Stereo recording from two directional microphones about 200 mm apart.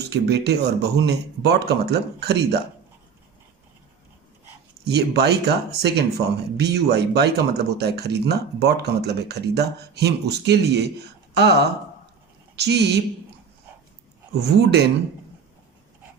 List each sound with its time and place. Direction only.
0.0 s speech: 55° right (ahead or behind)
4.9 s speech: 55° right (ahead or behind)
14.3 s speech: 55° right (ahead or behind)